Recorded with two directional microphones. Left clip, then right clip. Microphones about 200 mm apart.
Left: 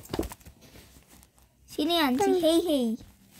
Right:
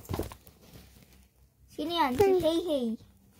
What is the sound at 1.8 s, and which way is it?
A child's voice, 35° left (ahead or behind).